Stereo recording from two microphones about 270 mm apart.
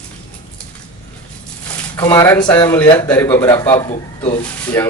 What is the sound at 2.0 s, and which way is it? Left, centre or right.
Speech, centre.